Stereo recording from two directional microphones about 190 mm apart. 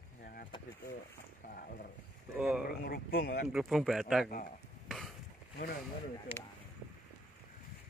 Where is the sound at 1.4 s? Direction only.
50° left (ahead or behind).